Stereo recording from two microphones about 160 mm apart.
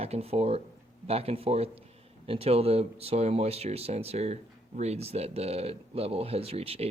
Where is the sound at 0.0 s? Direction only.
40° right (ahead or behind).